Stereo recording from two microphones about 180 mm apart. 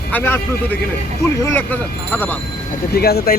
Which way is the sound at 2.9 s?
60° left (ahead or behind).